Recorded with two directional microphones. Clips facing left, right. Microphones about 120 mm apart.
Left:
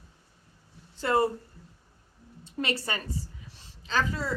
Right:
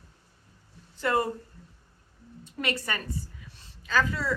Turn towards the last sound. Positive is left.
turn(degrees=25)  # may be behind; listen again after turning